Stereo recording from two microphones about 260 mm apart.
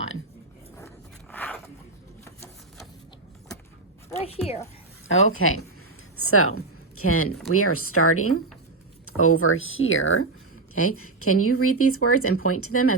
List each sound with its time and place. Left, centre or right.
0.8 s a sound: centre
2.2 s sewing machine: centre
4.2 s a woman's voice: left
5.0 s speech: left